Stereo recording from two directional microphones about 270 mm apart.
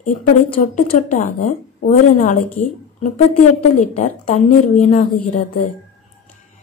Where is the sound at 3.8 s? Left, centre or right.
Left.